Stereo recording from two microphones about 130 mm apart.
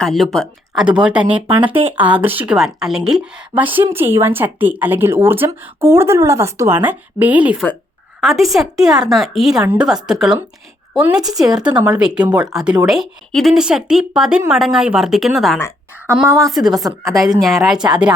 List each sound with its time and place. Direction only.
0.0 s speech: centre (ahead or behind)
16.2 s a woman's voice: 25° right (ahead or behind)
17.4 s speech: centre (ahead or behind)